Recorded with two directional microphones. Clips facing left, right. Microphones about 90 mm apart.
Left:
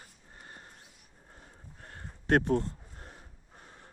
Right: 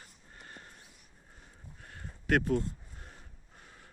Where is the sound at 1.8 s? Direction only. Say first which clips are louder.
Left 3 dB; 45° left (ahead or behind).